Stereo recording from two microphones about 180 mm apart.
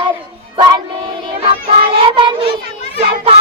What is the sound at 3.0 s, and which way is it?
Children playing, 30° right (ahead or behind).